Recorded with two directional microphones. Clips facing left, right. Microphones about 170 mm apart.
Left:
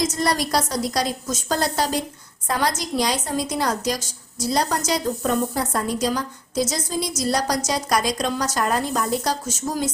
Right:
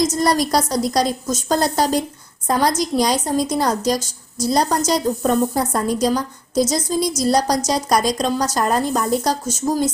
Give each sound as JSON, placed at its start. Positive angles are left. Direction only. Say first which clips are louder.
{"t": 0.0, "sound": "a woman's voice", "louder": "right 5 dB", "side_deg": -40}